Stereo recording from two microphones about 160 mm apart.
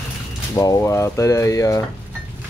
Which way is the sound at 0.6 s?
20° left (ahead or behind).